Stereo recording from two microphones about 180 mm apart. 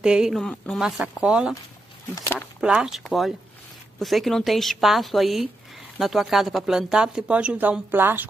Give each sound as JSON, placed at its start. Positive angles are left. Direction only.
{"t": 0.0, "sound": "speech", "side_deg": -5}